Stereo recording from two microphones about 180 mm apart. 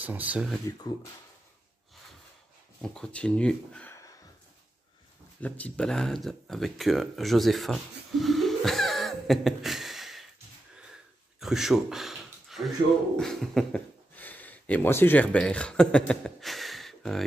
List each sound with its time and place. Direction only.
0.0 s speech: 10° right (ahead or behind)
0.7 s speech: 20° left (ahead or behind)
2.8 s speech: 5° left (ahead or behind)
5.4 s speech: 5° left (ahead or behind)
11.3 s a sound: centre (ahead or behind)
13.1 s speech: centre (ahead or behind)